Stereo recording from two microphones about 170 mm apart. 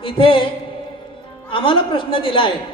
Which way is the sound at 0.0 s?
30° left (ahead or behind).